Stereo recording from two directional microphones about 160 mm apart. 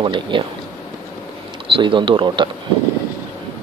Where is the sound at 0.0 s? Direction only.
30° right (ahead or behind).